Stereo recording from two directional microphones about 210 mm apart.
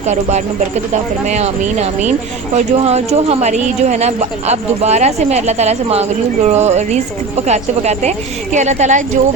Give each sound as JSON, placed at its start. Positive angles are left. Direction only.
{"t": 0.0, "sound": "speech", "side_deg": -35}